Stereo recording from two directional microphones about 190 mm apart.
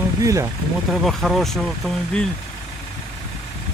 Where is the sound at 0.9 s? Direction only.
Centre (ahead or behind).